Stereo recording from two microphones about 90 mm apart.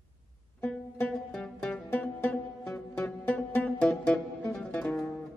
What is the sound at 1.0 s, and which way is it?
Music, 5° left (ahead or behind).